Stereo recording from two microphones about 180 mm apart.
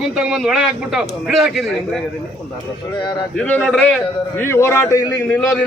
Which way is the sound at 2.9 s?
25° left (ahead or behind).